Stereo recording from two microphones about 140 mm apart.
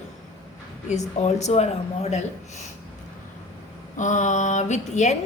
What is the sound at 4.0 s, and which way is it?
A woman's voice, 60° left (ahead or behind).